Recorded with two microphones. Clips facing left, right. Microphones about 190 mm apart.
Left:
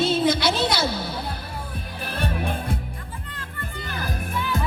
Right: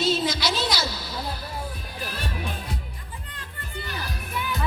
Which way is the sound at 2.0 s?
55° left (ahead or behind).